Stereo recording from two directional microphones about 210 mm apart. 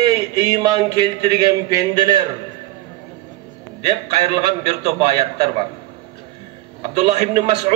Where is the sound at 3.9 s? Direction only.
20° right (ahead or behind).